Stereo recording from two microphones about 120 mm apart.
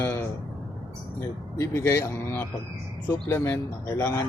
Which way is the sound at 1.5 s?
25° left (ahead or behind).